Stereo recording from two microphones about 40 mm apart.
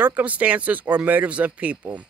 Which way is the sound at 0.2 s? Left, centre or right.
Right.